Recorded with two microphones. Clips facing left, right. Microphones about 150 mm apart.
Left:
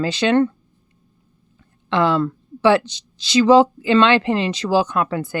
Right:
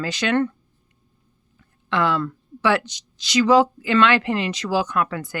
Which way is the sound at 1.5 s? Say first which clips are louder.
Left 4 dB; 30° left (ahead or behind).